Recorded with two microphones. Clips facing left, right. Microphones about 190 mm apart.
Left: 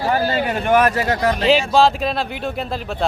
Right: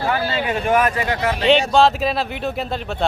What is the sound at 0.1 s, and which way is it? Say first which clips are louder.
Speech: left 4 dB; 40° left (ahead or behind).